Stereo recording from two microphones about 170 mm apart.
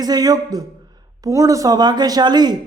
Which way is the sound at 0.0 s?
20° right (ahead or behind).